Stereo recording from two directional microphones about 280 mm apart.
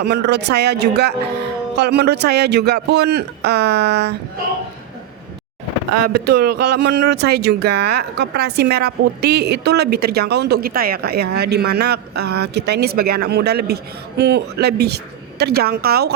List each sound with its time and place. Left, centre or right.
0.0 s a woman's voice: right
6.1 s a woman's voice: right
6.8 s speech: right
7.2 s a woman's voice: right